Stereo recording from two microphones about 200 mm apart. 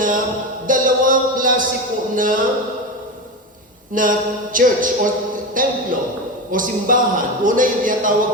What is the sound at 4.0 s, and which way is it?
Speech, 40° right (ahead or behind).